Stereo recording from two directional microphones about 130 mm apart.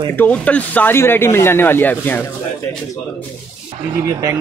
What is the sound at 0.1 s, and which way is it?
Speech, 10° left (ahead or behind).